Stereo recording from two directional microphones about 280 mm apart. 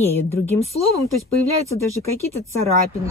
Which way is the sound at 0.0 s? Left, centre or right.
Centre.